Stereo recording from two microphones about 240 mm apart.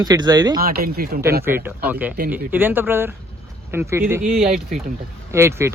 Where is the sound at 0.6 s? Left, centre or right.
Right.